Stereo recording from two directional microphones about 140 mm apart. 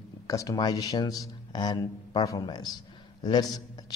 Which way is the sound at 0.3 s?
25° left (ahead or behind).